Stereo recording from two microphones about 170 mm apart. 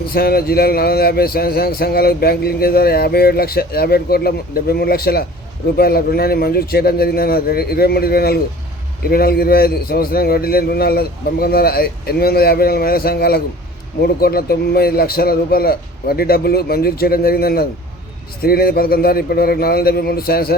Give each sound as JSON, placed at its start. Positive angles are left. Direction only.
{"t": 0.1, "sound": "speech", "side_deg": 65}